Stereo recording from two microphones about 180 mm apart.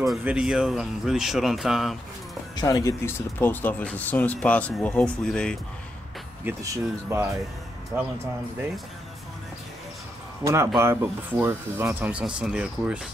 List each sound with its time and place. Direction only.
0.0 s speech: 5° right (ahead or behind)
2.5 s speech: 20° left (ahead or behind); by 5.6 s 5° left (ahead or behind)
6.4 s speech: 15° right (ahead or behind)
10.4 s speech: 15° right (ahead or behind)